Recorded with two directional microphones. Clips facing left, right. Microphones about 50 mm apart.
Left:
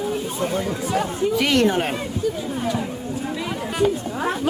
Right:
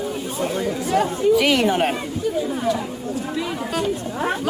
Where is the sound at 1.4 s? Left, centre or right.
Centre.